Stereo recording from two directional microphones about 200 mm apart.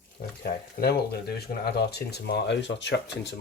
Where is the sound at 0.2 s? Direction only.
40° left (ahead or behind).